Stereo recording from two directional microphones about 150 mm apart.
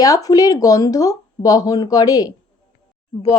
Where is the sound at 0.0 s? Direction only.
25° left (ahead or behind).